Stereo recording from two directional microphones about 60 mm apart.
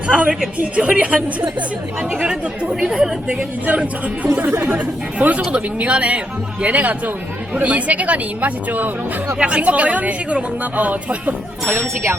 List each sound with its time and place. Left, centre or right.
0.1 s speech: centre